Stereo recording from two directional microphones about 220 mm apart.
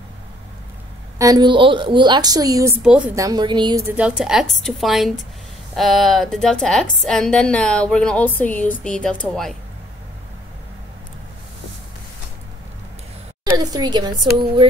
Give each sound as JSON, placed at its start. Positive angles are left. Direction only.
{"t": 1.1, "sound": "a woman's voice", "side_deg": -15}
{"t": 3.8, "sound": "a woman's voice", "side_deg": -5}
{"t": 13.6, "sound": "a woman's voice", "side_deg": -20}